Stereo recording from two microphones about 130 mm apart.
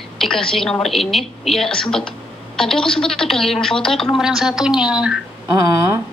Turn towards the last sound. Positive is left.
turn(degrees=-25)  # may be behind; listen again after turning